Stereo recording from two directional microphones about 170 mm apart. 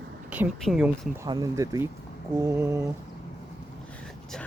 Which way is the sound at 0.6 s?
Centre (ahead or behind).